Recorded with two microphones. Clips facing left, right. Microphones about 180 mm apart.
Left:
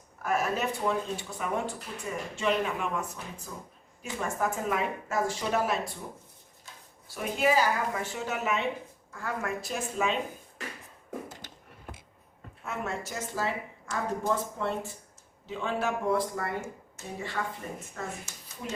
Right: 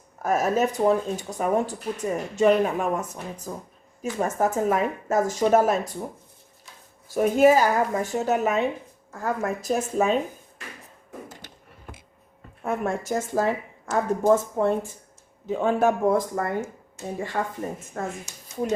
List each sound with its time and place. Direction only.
0.2 s speech: 40° right (ahead or behind)
7.1 s speech: 45° right (ahead or behind)
12.6 s speech: 50° right (ahead or behind)